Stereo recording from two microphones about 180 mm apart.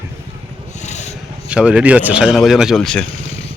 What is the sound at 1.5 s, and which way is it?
Speech, 5° right (ahead or behind).